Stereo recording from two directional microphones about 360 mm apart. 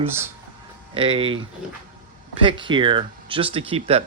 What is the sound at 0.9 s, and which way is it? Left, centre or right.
Speech, centre.